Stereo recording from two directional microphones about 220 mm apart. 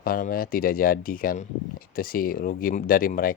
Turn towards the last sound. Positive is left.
turn(degrees=40)  # may be behind; listen again after turning